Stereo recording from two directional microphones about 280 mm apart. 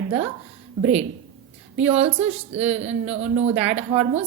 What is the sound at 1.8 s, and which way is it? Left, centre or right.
Speech, right.